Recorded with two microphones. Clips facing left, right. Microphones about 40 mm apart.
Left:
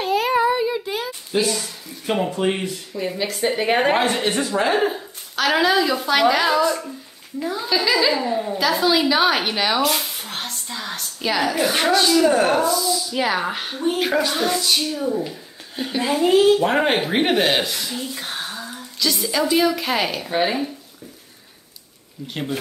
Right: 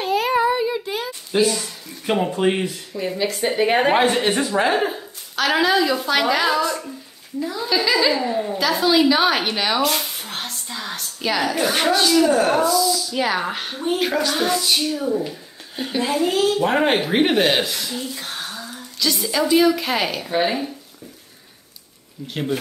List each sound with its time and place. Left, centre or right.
0.0 s child singing: centre
2.3 s speech: centre
2.9 s speech: centre
4.3 s a woman's voice: centre
4.7 s a woman's voice: centre
12.3 s speech: centre
18.3 s a sound: centre
18.9 s speech: centre
22.3 s speech: centre